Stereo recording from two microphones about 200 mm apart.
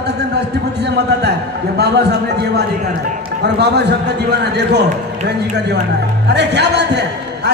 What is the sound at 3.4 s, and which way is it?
Speech, 55° right (ahead or behind).